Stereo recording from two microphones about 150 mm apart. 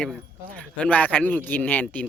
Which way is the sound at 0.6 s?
10° left (ahead or behind).